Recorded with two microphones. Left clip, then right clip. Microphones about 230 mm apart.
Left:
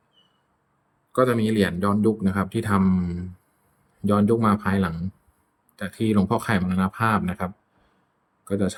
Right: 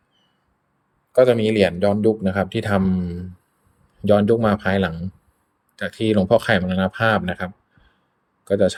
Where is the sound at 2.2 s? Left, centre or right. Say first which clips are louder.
Right 4 dB; centre.